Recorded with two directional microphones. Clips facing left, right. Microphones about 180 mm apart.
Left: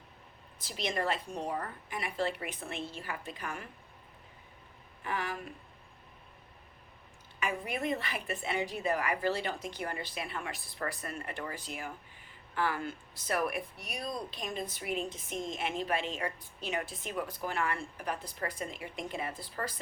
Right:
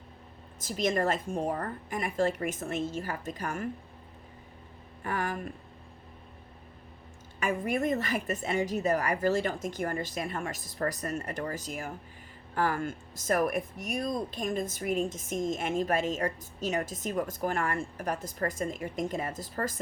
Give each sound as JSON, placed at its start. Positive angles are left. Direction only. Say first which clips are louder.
{"t": 0.6, "sound": "speech", "louder": "right 6 dB", "side_deg": -45}
{"t": 5.0, "sound": "speech", "louder": "right 4 dB", "side_deg": -45}
{"t": 7.3, "sound": "speech", "louder": "right 6 dB", "side_deg": -45}